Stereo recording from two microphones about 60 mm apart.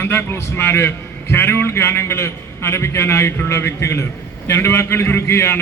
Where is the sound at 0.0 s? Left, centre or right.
Left.